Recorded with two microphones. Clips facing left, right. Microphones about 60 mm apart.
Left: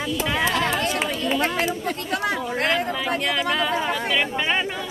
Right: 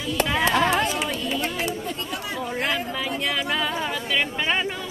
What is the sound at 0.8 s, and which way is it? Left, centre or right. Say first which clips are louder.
Run: left 2 dB; left.